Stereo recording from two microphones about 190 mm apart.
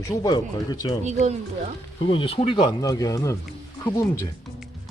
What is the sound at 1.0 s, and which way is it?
Speech, 35° right (ahead or behind).